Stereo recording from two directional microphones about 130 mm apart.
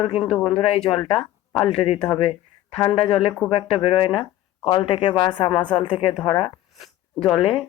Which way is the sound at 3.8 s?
45° left (ahead or behind).